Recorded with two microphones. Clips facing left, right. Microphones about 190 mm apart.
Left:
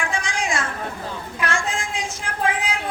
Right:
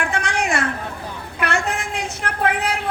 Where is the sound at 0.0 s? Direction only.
65° right (ahead or behind).